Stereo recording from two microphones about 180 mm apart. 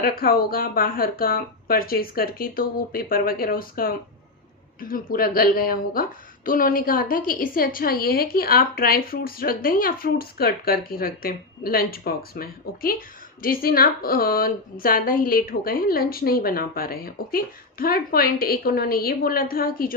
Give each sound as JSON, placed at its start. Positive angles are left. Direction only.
{"t": 0.0, "sound": "a woman's voice", "side_deg": 55}